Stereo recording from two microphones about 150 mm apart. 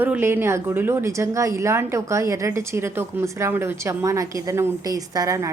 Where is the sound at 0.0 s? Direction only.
15° right (ahead or behind).